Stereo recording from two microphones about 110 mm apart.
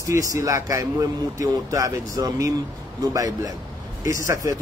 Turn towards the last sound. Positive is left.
turn(degrees=-30)  # may be behind; listen again after turning